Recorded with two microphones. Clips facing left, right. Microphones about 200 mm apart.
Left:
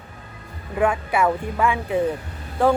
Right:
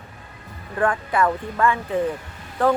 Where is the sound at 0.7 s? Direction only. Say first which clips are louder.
Left 1 dB; 10° left (ahead or behind).